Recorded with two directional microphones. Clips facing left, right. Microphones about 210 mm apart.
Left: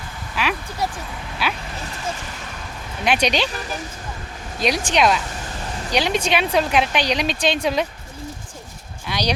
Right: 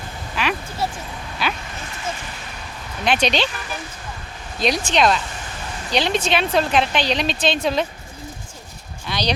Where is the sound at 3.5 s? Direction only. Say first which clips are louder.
Left 3 dB; 40° left (ahead or behind).